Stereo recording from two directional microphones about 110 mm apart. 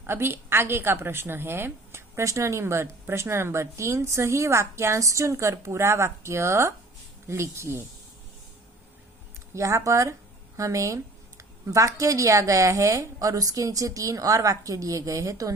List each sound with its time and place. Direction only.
0.0 s a woman's voice: 20° right (ahead or behind)
9.6 s a woman's voice: 25° right (ahead or behind)